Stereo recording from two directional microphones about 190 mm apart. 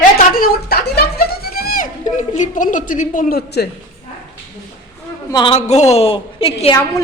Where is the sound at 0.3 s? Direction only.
50° left (ahead or behind).